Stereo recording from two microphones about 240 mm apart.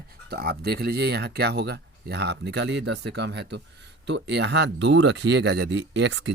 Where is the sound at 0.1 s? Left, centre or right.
Right.